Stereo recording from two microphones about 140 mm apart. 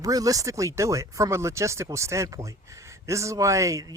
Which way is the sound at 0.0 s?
25° right (ahead or behind).